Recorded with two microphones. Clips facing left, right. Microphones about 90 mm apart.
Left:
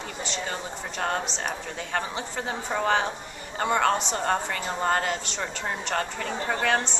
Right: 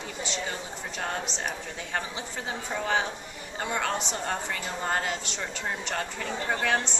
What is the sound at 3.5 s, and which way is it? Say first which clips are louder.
Speech: left 6 dB; 55° left (ahead or behind).